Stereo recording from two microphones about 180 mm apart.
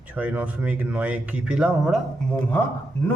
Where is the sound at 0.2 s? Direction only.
10° right (ahead or behind).